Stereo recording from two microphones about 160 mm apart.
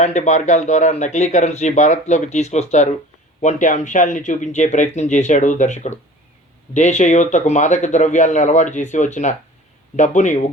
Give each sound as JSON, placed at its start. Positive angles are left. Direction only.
{"t": 0.0, "sound": "speech", "side_deg": 45}